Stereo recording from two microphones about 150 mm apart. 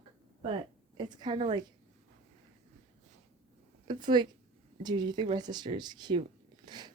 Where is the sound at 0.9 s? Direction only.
30° right (ahead or behind).